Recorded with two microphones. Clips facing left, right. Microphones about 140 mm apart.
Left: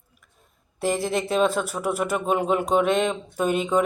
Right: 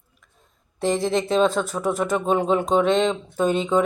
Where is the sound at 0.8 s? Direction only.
10° left (ahead or behind).